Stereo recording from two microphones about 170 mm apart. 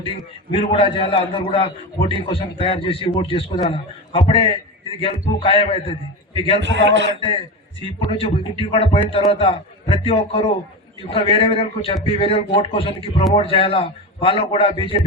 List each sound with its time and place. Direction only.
0.0 s speech: 30° left (ahead or behind)
6.6 s a man's voice: 90° right
7.8 s speech: 35° left (ahead or behind)